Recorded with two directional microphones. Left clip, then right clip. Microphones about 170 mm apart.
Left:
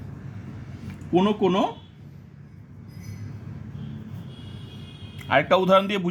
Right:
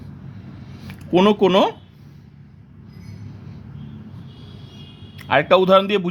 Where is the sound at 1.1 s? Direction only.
60° right (ahead or behind).